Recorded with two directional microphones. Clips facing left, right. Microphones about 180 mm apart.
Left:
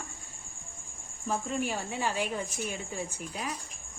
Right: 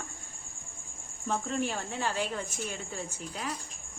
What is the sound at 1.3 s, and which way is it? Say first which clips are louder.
Speech: even; 10° left (ahead or behind).